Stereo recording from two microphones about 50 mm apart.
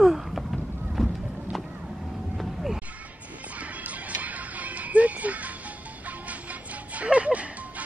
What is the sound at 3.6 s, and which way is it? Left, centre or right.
Music, right.